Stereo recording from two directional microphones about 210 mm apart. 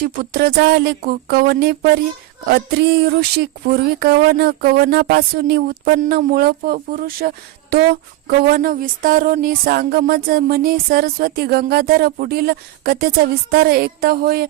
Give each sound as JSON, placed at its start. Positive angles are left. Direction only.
{"t": 0.0, "sound": "music", "side_deg": -45}